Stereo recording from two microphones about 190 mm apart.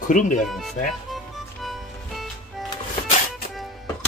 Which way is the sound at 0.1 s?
45° left (ahead or behind).